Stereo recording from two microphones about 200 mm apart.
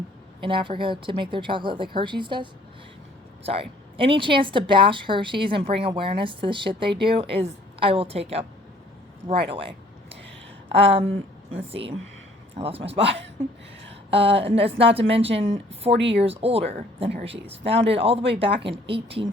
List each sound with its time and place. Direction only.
0.4 s speech: 25° right (ahead or behind)